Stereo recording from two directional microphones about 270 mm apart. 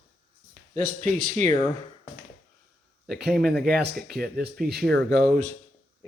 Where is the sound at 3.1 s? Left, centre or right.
Right.